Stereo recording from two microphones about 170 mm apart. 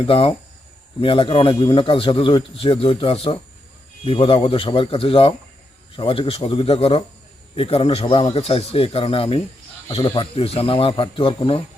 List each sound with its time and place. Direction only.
0.0 s a man's voice: 30° left (ahead or behind)